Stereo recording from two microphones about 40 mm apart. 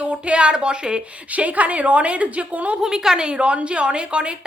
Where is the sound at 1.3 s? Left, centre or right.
Right.